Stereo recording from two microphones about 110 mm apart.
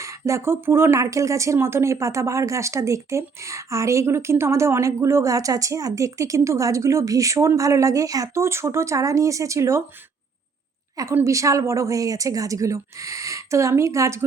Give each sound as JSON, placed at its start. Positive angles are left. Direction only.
{"t": 0.0, "sound": "speech", "side_deg": -25}
{"t": 11.1, "sound": "speech", "side_deg": -30}